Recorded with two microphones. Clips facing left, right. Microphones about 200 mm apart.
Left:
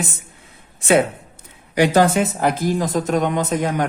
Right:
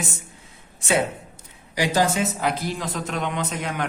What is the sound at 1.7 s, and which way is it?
Speech, 60° left (ahead or behind).